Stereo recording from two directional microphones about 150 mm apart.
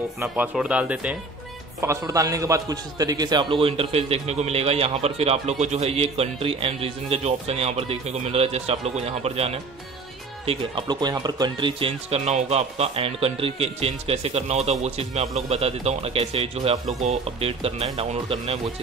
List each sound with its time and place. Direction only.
0.6 s speech: 10° right (ahead or behind)
1.8 s speech: 20° right (ahead or behind); by 18.6 s 45° right (ahead or behind)